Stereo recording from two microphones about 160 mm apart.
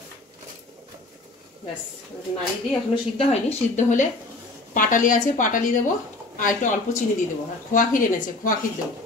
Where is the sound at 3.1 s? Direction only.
45° left (ahead or behind).